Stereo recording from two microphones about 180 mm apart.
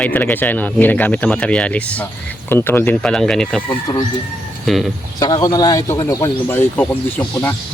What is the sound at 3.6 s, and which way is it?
Speech, 25° left (ahead or behind).